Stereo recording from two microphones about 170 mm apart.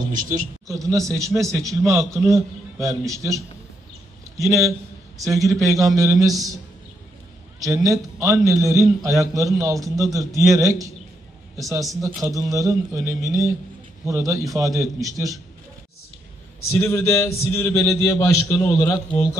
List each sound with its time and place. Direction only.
0.1 s a man's voice: 50° right (ahead or behind)
0.7 s a man's voice: 20° right (ahead or behind)
7.6 s a man's voice: 20° right (ahead or behind)
12.0 s a man's voice: 20° right (ahead or behind)
16.7 s a man's voice: 15° left (ahead or behind)